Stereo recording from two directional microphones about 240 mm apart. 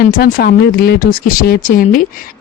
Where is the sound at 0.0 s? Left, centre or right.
Left.